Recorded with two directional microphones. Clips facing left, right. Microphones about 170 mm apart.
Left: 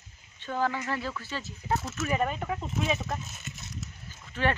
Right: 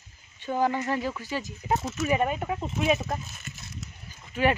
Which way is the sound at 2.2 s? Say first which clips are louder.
Right 3 dB; 10° right (ahead or behind).